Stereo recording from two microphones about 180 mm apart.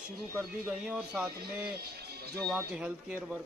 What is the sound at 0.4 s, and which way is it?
Speech, 5° right (ahead or behind).